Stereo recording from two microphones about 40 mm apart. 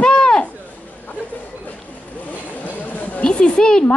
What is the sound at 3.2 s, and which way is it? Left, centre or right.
Speech, left.